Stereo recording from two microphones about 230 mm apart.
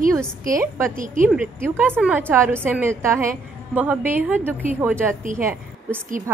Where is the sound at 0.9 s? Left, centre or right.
Right.